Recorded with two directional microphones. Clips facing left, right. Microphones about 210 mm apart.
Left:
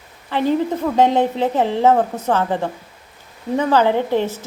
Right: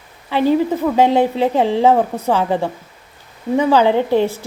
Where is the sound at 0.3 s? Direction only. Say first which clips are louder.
Right 3 dB; 10° right (ahead or behind).